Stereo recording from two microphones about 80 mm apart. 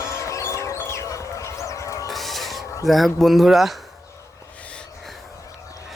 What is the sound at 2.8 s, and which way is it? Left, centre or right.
Speech, centre.